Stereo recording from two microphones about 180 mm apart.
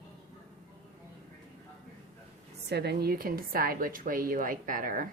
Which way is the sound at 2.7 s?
65° right (ahead or behind).